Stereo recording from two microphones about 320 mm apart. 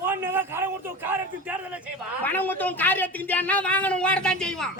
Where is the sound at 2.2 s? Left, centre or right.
Centre.